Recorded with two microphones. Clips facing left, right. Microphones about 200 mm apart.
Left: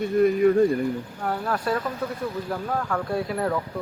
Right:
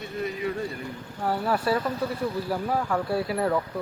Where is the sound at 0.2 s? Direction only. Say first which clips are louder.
Left 11 dB; 50° left (ahead or behind).